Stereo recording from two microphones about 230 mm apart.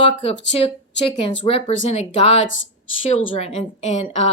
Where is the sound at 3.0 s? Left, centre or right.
Left.